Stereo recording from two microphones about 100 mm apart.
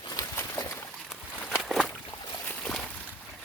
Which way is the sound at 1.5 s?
Centre (ahead or behind).